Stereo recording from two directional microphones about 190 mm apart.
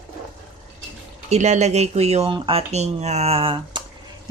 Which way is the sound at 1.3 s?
35° right (ahead or behind).